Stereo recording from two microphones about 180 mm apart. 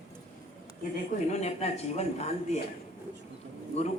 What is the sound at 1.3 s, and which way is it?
A man's voice, 35° left (ahead or behind).